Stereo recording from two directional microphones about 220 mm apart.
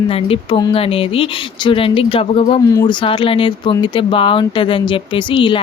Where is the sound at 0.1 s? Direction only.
25° left (ahead or behind).